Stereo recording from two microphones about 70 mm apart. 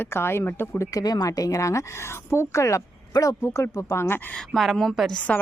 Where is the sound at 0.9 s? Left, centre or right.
Left.